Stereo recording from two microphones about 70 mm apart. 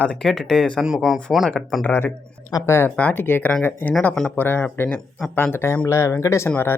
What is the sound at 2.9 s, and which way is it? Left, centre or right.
Speech, left.